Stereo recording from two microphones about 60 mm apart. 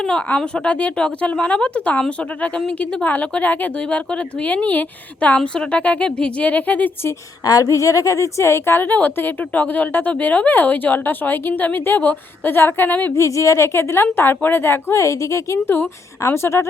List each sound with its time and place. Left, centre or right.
0.0 s speech: centre; by 3.7 s left
3.8 s speech: centre
5.4 s speech: centre
7.4 s a woman's voice: left
8.9 s a woman's voice: left
13.1 s a woman's voice: left
14.9 s a woman's voice: left